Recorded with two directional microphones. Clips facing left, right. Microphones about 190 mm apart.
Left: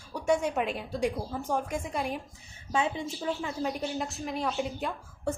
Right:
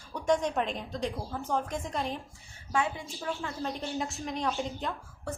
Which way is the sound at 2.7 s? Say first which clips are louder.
Left 1 dB; 25° left (ahead or behind).